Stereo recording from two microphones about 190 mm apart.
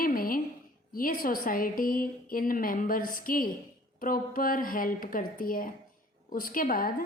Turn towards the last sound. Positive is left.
turn(degrees=50)  # may be behind; listen again after turning